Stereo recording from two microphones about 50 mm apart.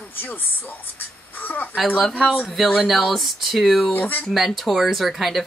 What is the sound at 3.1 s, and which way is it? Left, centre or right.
Speech, centre.